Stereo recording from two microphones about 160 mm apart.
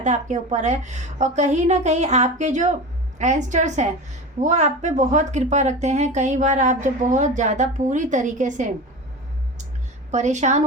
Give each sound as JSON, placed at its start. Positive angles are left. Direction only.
{"t": 0.0, "sound": "speech", "side_deg": -50}
{"t": 10.1, "sound": "speech", "side_deg": -45}